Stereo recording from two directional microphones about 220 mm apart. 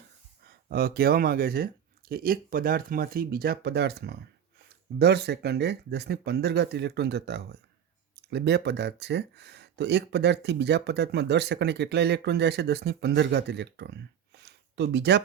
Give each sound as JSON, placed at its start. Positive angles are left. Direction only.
{"t": 0.4, "sound": "speech", "side_deg": -45}